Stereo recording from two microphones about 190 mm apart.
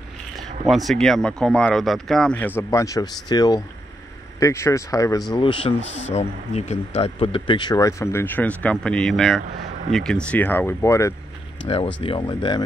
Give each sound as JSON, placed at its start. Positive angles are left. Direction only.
{"t": 0.7, "sound": "speech", "side_deg": 0}
{"t": 11.6, "sound": "speech", "side_deg": 30}